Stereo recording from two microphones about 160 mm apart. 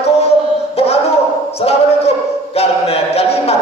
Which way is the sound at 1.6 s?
40° left (ahead or behind).